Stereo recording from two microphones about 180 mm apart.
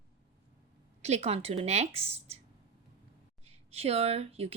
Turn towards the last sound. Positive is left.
turn(degrees=-35)  # may be behind; listen again after turning